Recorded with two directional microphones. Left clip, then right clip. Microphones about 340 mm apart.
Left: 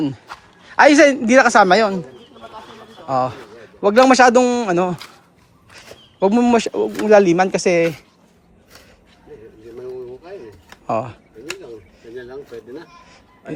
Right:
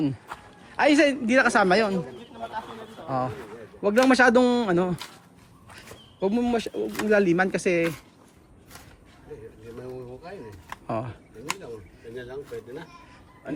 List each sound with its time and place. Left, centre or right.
0.8 s a man's voice: centre
3.1 s a man's voice: centre
6.2 s a man's voice: left
10.8 s speech: centre